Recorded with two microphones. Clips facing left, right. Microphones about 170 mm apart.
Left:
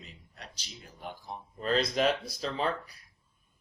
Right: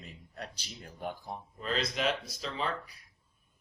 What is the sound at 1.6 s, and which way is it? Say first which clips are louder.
Speech: left 6 dB; 40° left (ahead or behind).